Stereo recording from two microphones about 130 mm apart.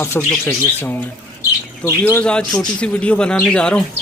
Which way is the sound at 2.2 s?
5° left (ahead or behind).